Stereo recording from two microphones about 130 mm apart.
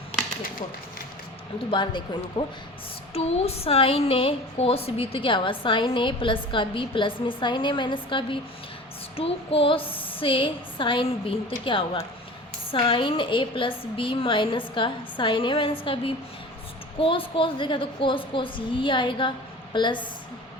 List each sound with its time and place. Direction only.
1.7 s a woman's voice: 40° left (ahead or behind)
3.2 s a woman's voice: 50° left (ahead or behind); by 20.1 s 35° left (ahead or behind)